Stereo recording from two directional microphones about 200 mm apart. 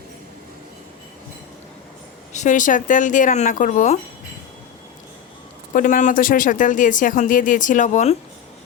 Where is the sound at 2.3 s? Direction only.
35° left (ahead or behind).